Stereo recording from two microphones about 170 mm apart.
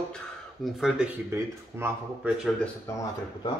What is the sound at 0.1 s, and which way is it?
Speech, centre (ahead or behind).